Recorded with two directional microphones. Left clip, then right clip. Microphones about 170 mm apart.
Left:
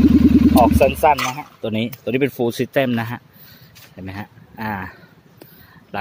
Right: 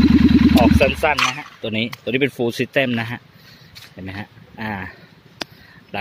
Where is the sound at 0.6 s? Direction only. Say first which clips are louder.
Left 2 dB; 10° left (ahead or behind).